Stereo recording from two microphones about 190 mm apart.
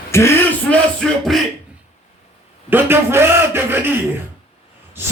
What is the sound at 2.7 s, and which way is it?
A man's voice, 10° right (ahead or behind).